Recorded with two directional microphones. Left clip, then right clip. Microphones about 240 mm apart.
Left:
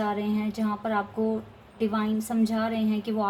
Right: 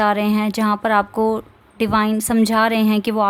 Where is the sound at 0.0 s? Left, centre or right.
Right.